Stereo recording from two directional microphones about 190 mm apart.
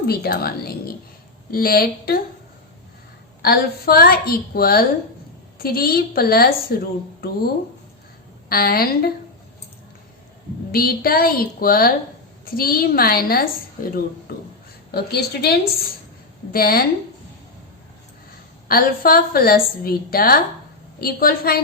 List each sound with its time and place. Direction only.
0.1 s a woman's voice: 55° left (ahead or behind)
3.4 s a woman's voice: 55° left (ahead or behind)
10.7 s a woman's voice: 50° left (ahead or behind)
14.9 s a woman's voice: 60° left (ahead or behind)
18.7 s a woman's voice: 50° left (ahead or behind)